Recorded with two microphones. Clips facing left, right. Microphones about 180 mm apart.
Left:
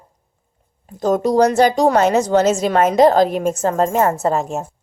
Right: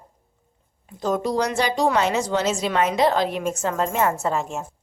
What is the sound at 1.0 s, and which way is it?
Speech, 45° left (ahead or behind).